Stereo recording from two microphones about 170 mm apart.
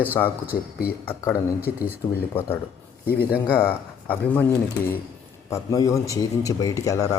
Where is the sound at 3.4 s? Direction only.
10° left (ahead or behind).